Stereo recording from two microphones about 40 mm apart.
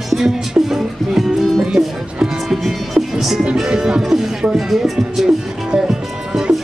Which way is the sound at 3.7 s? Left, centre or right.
Centre.